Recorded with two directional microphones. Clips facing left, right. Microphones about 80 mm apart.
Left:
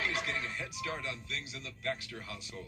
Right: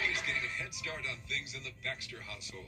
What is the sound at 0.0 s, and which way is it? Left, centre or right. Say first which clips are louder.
Speech: left 1 dB; left.